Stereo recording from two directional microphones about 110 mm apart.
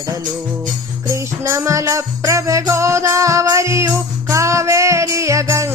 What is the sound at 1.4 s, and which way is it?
Music, 25° right (ahead or behind).